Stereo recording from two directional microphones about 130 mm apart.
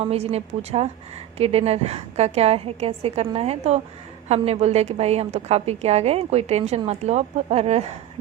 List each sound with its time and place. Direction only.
0.0 s a woman's voice: 50° right (ahead or behind)